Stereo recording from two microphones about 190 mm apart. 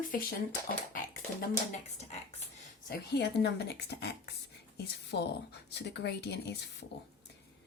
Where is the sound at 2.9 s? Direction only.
60° left (ahead or behind).